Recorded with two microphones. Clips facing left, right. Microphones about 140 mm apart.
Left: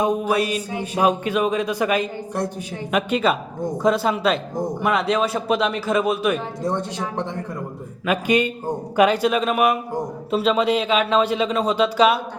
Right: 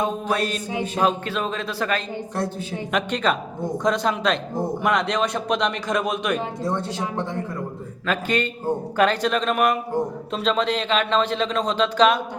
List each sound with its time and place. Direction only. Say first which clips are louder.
0.0 s speech: left 3 dB; 10° left (ahead or behind)
6.6 s speech: left 2 dB; 20° left (ahead or behind)
8.0 s speech: left 4 dB; 10° left (ahead or behind)